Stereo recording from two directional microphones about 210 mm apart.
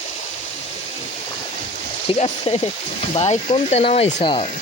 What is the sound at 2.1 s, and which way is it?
Speech, 30° left (ahead or behind).